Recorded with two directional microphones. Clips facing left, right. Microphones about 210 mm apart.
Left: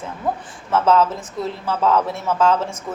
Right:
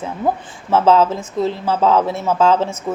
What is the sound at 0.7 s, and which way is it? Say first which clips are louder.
A woman's voice: right 3 dB; 30° right (ahead or behind).